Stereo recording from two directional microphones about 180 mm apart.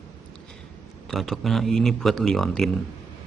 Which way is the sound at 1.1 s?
Centre (ahead or behind).